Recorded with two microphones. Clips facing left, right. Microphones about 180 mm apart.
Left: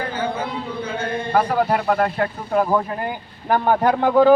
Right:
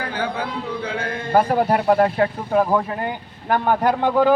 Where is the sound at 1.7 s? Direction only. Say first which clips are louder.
Right 3 dB; 30° right (ahead or behind).